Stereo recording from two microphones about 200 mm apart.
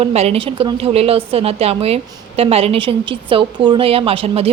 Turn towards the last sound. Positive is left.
turn(degrees=-30)  # may be behind; listen again after turning